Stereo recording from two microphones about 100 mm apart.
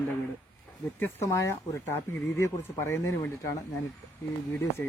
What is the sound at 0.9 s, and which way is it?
Speech, 20° left (ahead or behind).